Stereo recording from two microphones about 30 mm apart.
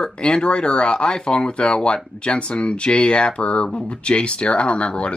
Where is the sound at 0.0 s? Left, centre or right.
Left.